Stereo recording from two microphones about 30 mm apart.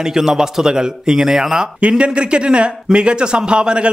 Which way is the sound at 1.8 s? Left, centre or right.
Right.